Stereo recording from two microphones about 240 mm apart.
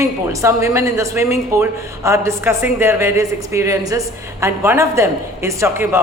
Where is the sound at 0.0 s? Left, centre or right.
Centre.